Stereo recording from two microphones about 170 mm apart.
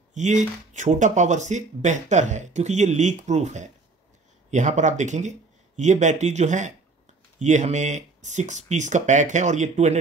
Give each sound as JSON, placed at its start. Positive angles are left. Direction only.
{"t": 0.1, "sound": "speech", "side_deg": -45}